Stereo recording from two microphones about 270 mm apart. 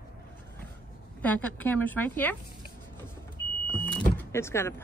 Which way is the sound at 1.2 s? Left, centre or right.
Centre.